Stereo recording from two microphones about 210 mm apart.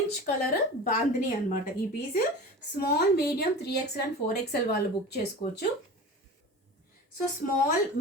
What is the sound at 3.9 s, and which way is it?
A woman's voice, 50° left (ahead or behind).